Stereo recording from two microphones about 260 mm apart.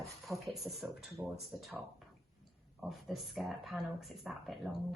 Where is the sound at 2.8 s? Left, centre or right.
Centre.